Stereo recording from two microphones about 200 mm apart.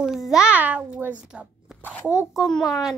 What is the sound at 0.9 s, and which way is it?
Zipper, 5° right (ahead or behind).